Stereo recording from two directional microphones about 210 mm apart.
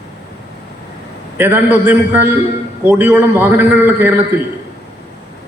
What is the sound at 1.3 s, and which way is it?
A man's voice, 10° right (ahead or behind).